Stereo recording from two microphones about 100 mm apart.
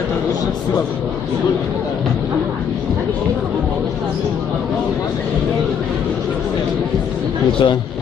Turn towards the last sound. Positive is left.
turn(degrees=55)  # may be behind; listen again after turning